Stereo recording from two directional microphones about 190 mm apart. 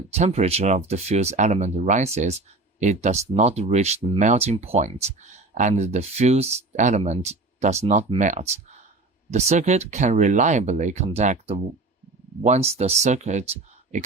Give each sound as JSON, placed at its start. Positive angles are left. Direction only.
{"t": 0.2, "sound": "speech", "side_deg": -35}